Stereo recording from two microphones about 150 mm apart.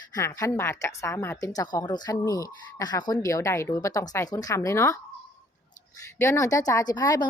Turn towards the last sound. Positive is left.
turn(degrees=25)  # may be behind; listen again after turning